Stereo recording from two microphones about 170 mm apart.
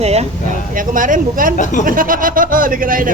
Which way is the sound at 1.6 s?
45° left (ahead or behind).